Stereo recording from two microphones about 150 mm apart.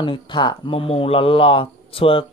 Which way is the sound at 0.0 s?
30° left (ahead or behind).